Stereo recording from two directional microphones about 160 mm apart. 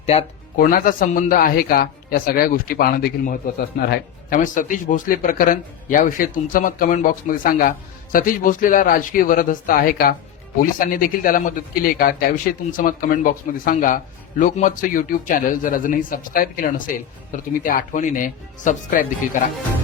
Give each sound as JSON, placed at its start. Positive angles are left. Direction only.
{"t": 0.0, "sound": "speech", "side_deg": 40}
{"t": 0.5, "sound": "a man's voice", "side_deg": 60}
{"t": 4.4, "sound": "a man's voice", "side_deg": 55}